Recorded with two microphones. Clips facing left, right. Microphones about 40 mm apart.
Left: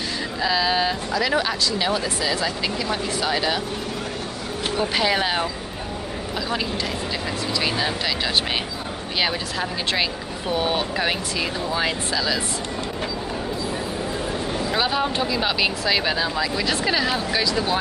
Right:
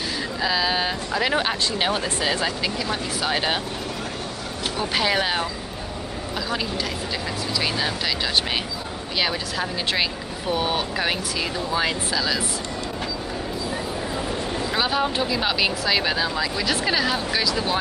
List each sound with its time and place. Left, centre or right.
0.4 s speech: centre
1.4 s speech: right
2.6 s speech: centre
4.7 s speech: centre
9.2 s a woman's voice: centre
14.7 s speech: centre